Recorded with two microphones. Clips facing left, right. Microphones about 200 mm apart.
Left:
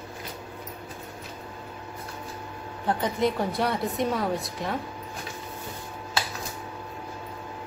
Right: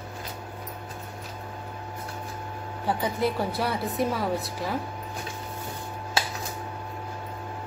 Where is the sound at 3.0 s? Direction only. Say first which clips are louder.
Left 1 dB; 5° right (ahead or behind).